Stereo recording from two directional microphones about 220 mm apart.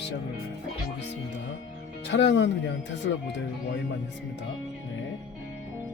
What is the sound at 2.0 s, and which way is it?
Speech, 55° left (ahead or behind).